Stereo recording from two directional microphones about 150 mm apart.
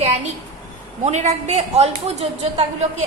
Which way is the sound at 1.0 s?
50° right (ahead or behind).